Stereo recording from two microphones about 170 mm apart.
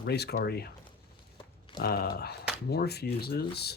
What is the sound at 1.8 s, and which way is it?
A man's voice, 60° left (ahead or behind).